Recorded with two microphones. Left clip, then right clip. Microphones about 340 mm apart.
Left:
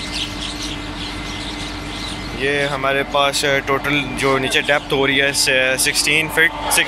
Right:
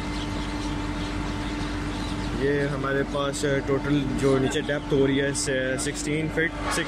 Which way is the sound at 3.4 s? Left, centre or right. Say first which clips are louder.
Left 8 dB; left.